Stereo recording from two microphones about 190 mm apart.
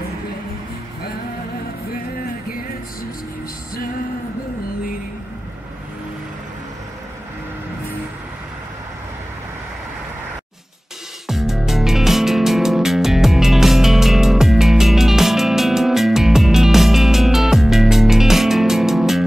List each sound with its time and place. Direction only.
11.2 s music: centre (ahead or behind)